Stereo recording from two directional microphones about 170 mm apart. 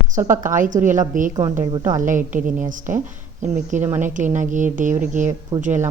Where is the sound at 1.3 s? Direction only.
20° right (ahead or behind).